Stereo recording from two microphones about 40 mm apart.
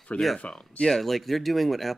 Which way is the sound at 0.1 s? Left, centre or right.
Left.